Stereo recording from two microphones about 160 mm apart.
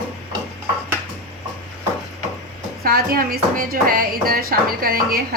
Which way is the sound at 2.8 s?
70° right (ahead or behind).